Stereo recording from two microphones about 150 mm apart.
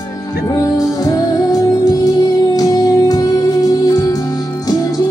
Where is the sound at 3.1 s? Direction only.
25° left (ahead or behind).